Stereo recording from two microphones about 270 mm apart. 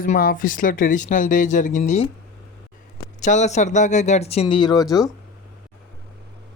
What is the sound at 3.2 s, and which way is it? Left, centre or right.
Speech, left.